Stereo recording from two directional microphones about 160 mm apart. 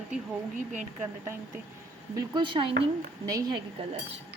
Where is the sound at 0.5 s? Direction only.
50° right (ahead or behind).